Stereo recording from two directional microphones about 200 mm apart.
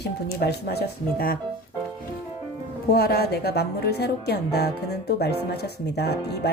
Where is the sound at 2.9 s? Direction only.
50° left (ahead or behind).